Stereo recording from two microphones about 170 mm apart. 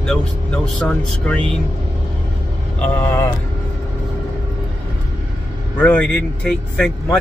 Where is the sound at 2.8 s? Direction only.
10° left (ahead or behind).